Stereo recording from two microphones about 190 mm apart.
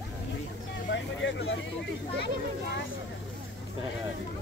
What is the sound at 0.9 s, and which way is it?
Vehicle, 75° left (ahead or behind).